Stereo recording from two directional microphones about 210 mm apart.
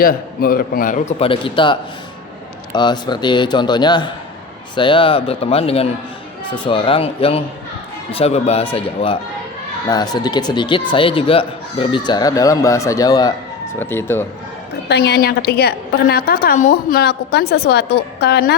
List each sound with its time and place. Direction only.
0.0 s a man's voice: 45° left (ahead or behind); by 14.3 s 10° left (ahead or behind)
14.8 s a woman's voice: 50° left (ahead or behind)
17.0 s a woman's voice: 50° left (ahead or behind)